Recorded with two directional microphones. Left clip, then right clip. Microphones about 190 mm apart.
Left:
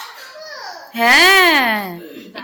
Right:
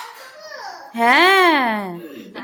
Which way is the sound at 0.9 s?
10° right (ahead or behind).